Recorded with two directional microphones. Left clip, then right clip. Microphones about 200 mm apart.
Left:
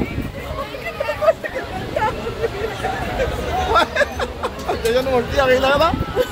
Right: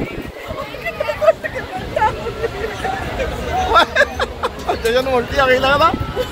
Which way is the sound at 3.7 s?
5° right (ahead or behind).